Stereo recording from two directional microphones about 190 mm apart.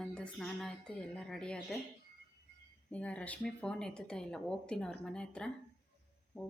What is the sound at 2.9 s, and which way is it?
A woman's voice, 5° left (ahead or behind).